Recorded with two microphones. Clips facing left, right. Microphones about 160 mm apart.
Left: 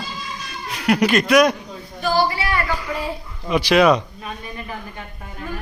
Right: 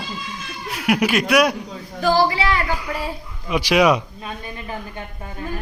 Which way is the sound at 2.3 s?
90° right.